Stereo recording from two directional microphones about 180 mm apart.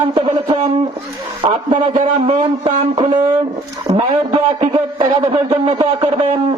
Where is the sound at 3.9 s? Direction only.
30° right (ahead or behind).